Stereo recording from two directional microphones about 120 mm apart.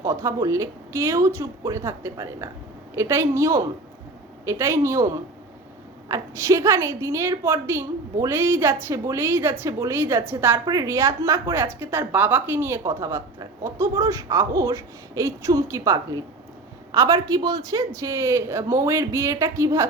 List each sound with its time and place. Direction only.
0.0 s a woman's voice: 25° right (ahead or behind)